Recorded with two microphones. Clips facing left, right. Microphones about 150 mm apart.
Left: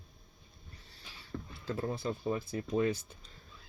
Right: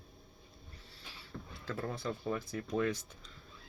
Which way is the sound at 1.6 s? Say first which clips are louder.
Left 3 dB; 25° left (ahead or behind).